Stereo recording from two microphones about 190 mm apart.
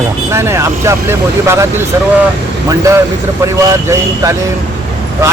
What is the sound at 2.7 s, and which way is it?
Speech, 15° right (ahead or behind).